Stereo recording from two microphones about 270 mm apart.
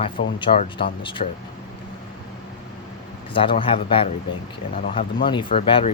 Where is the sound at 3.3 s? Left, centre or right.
Centre.